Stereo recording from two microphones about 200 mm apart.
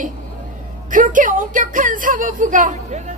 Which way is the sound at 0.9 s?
40° right (ahead or behind).